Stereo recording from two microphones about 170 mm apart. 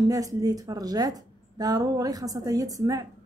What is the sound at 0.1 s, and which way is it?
Speech, 20° right (ahead or behind).